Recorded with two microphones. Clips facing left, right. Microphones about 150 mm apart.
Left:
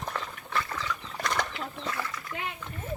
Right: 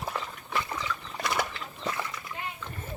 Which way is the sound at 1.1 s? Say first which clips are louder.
Right 1 dB; 5° right (ahead or behind).